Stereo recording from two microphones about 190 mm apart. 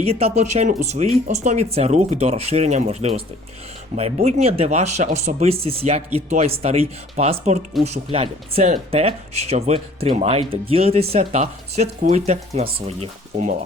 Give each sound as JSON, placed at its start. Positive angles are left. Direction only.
{"t": 0.0, "sound": "speech", "side_deg": -30}